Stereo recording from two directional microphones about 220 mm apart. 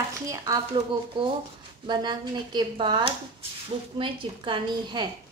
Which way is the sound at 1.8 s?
20° right (ahead or behind).